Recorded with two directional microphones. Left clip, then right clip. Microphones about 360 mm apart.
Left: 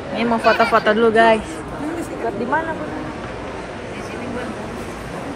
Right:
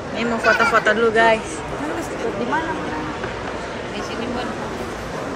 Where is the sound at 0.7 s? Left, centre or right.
Centre.